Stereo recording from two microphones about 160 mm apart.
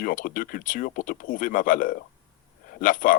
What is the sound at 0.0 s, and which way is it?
Speech, 60° left (ahead or behind).